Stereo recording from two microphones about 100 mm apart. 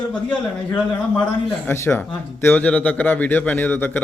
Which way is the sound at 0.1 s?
10° left (ahead or behind).